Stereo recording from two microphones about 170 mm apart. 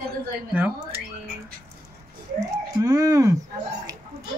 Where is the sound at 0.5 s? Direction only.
10° right (ahead or behind).